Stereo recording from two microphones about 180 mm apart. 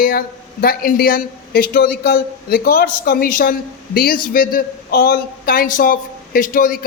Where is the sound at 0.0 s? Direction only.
55° left (ahead or behind).